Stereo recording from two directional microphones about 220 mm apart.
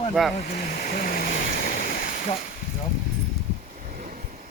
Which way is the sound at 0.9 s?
40° left (ahead or behind).